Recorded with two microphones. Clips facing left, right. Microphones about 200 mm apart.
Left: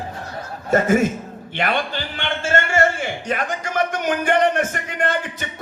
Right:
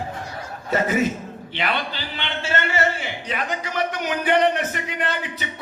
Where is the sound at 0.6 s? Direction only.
50° left (ahead or behind).